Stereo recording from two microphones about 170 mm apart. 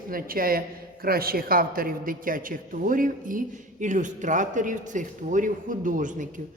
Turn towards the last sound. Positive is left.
turn(degrees=-50)  # may be behind; listen again after turning